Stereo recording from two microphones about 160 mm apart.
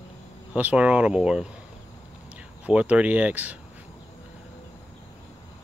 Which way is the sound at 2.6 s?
10° right (ahead or behind).